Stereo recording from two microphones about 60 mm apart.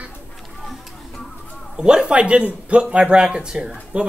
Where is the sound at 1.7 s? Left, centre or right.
Centre.